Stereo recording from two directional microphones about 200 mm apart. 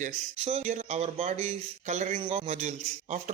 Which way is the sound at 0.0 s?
35° right (ahead or behind).